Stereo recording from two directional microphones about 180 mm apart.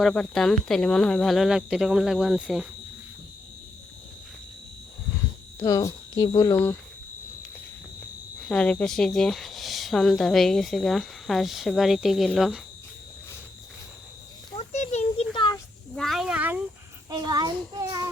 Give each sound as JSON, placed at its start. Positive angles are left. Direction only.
{"t": 0.0, "sound": "speech", "side_deg": 5}
{"t": 5.5, "sound": "speech", "side_deg": 15}
{"t": 8.4, "sound": "speech", "side_deg": 5}
{"t": 14.6, "sound": "a sound", "side_deg": 40}
{"t": 15.3, "sound": "a sound", "side_deg": 25}
{"t": 16.0, "sound": "cat", "side_deg": 0}
{"t": 17.1, "sound": "a child's voice", "side_deg": -20}